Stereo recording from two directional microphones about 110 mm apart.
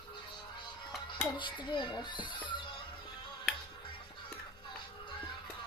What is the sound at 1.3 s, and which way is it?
A child's voice, 45° left (ahead or behind).